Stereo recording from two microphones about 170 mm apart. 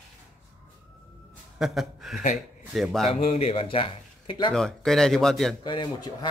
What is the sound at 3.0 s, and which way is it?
Speech, 35° left (ahead or behind).